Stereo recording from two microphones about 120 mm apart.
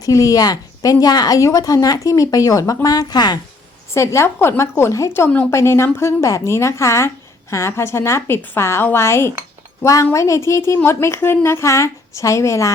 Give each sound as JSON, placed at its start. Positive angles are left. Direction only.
{"t": 0.0, "sound": "a woman's voice", "side_deg": 30}
{"t": 3.9, "sound": "a woman's voice", "side_deg": 25}